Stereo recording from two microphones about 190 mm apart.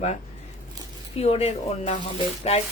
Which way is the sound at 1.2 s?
35° left (ahead or behind).